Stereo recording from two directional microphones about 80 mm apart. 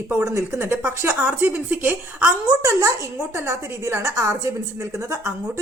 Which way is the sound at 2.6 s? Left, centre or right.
Right.